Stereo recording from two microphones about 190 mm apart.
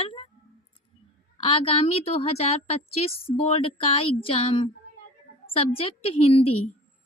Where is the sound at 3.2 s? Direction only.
30° left (ahead or behind).